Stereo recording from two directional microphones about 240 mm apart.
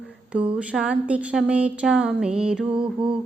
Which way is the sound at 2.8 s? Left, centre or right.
Centre.